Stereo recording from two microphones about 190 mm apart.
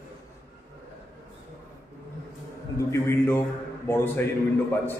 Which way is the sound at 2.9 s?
15° left (ahead or behind).